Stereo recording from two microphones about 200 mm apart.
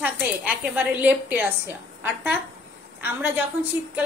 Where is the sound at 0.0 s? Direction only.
10° right (ahead or behind).